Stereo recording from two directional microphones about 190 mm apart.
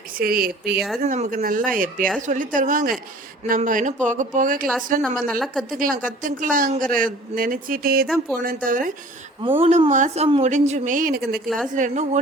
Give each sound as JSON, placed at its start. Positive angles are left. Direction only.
{"t": 0.1, "sound": "a woman's voice", "side_deg": -50}
{"t": 1.0, "sound": "a woman's voice", "side_deg": -40}
{"t": 5.0, "sound": "speech", "side_deg": 5}
{"t": 5.6, "sound": "a woman's voice", "side_deg": -45}
{"t": 8.0, "sound": "speech", "side_deg": 0}
{"t": 8.4, "sound": "a woman's voice", "side_deg": -45}
{"t": 9.6, "sound": "speech", "side_deg": -35}
{"t": 11.4, "sound": "speech", "side_deg": 0}
{"t": 11.7, "sound": "speech", "side_deg": -40}